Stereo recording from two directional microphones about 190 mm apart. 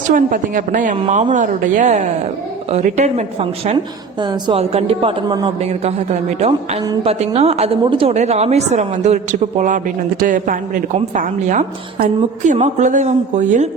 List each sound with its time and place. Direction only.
0.1 s a woman's voice: 45° right (ahead or behind)
4.2 s a woman's voice: 25° right (ahead or behind); by 13.7 s 40° right (ahead or behind)